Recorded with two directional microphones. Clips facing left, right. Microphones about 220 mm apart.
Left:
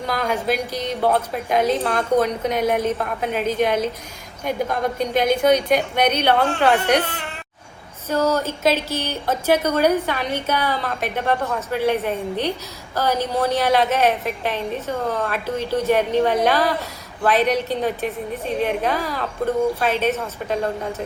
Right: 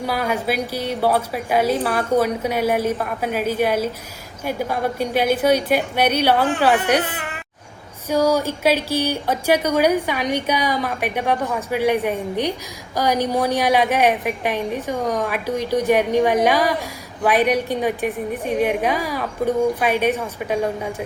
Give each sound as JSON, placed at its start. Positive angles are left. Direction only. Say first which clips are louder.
{"t": 0.0, "sound": "music", "louder": "right 1 dB", "side_deg": -10}
{"t": 0.4, "sound": "a woman's voice", "louder": "even", "side_deg": -10}